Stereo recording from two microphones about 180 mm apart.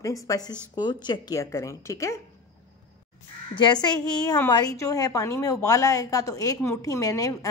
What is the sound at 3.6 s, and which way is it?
A woman's voice, 25° left (ahead or behind).